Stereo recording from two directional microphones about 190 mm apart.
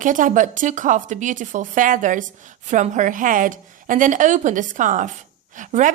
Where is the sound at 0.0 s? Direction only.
45° right (ahead or behind).